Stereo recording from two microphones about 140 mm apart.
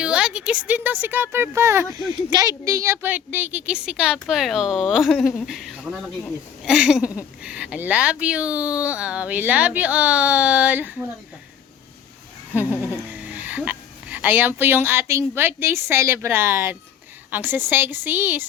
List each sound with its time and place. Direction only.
0.0 s speech: 5° right (ahead or behind)
2.0 s speech: 30° right (ahead or behind); by 11.0 s 10° right (ahead or behind)
12.5 s a woman's voice: 10° right (ahead or behind)